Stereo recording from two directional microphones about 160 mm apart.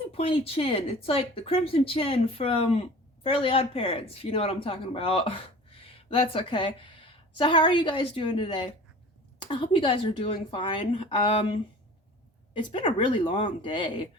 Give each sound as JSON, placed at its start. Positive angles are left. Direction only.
{"t": 0.1, "sound": "speech", "side_deg": 35}